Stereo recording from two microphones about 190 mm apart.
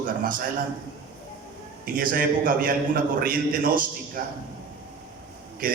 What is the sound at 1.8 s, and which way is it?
A man's voice, 45° right (ahead or behind).